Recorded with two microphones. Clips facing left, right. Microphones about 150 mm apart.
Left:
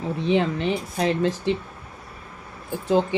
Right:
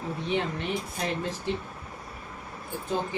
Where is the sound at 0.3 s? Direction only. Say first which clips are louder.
Left 6 dB; 90° left.